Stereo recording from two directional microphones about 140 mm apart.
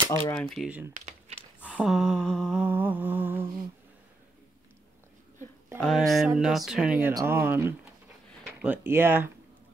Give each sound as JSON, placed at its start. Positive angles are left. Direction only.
{"t": 0.2, "sound": "speech", "side_deg": 10}
{"t": 0.7, "sound": "speech", "side_deg": -10}
{"t": 0.9, "sound": "crumpling", "side_deg": -50}
{"t": 1.8, "sound": "speech", "side_deg": 0}
{"t": 2.6, "sound": "humming", "side_deg": -15}
{"t": 5.8, "sound": "speech", "side_deg": 0}
{"t": 7.2, "sound": "speech", "side_deg": -15}